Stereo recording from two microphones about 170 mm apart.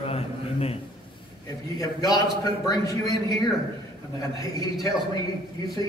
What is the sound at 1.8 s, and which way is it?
A man's voice, 20° left (ahead or behind).